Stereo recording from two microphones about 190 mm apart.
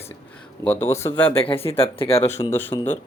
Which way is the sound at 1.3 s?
30° left (ahead or behind).